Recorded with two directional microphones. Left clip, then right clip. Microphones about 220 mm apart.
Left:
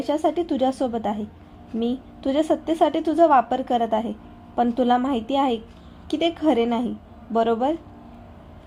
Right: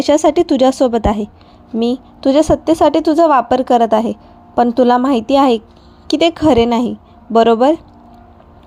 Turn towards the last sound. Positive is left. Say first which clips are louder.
# right 11 dB
turn(degrees=-30)  # may be behind; listen again after turning